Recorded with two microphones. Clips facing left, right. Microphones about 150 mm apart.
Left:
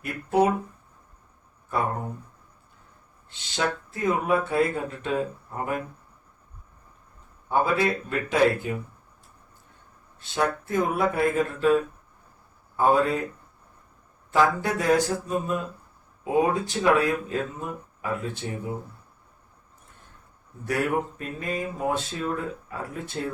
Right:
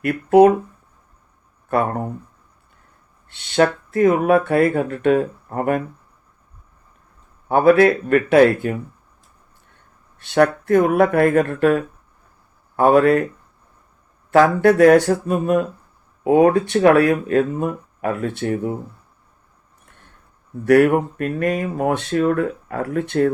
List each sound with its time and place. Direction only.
0.0 s speech: 65° right (ahead or behind)
1.7 s speech: 65° right (ahead or behind)
3.2 s speech: 60° right (ahead or behind)
7.4 s speech: 70° right (ahead or behind)
10.2 s speech: 70° right (ahead or behind)
14.3 s speech: 70° right (ahead or behind)
20.7 s speech: 70° right (ahead or behind)